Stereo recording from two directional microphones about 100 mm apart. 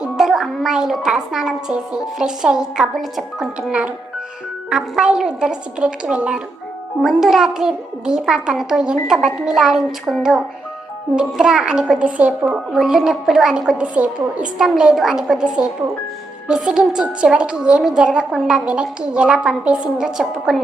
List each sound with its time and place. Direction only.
0.0 s a woman's voice: 5° right (ahead or behind)
11.3 s a woman's voice: 5° right (ahead or behind)